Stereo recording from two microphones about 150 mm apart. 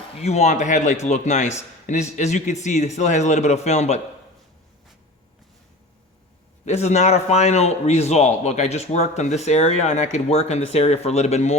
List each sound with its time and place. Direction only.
0.2 s a man's voice: 45° left (ahead or behind)
6.7 s a man's voice: 45° left (ahead or behind)